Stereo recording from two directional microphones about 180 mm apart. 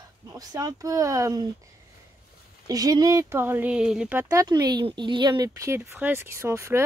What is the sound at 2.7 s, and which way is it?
Speech, 20° right (ahead or behind).